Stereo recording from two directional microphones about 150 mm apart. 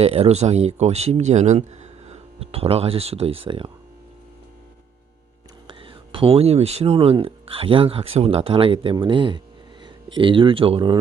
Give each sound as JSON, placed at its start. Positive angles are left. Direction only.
{"t": 0.0, "sound": "speech", "side_deg": -45}
{"t": 5.6, "sound": "speech", "side_deg": -35}